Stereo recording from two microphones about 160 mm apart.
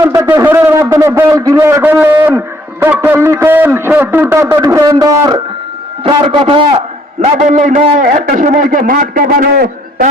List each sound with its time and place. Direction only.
0.0 s a man's voice: 15° right (ahead or behind)
6.0 s a man's voice: 35° right (ahead or behind)
7.3 s a man's voice: 45° right (ahead or behind); by 10.1 s 65° right (ahead or behind)